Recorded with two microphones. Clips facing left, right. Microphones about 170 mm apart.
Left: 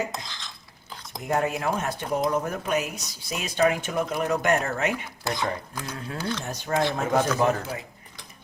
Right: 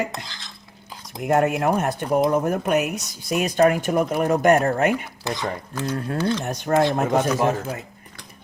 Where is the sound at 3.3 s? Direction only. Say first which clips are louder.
Right 6 dB; 50° right (ahead or behind).